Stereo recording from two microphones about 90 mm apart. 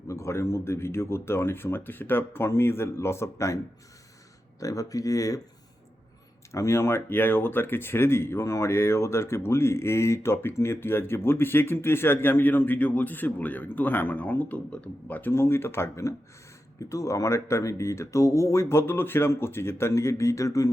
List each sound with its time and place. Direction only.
0.1 s speech: 35° left (ahead or behind)
4.6 s speech: 40° left (ahead or behind)
6.5 s speech: 30° left (ahead or behind)